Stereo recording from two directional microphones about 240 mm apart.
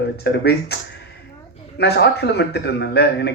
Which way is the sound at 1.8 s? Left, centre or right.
Left.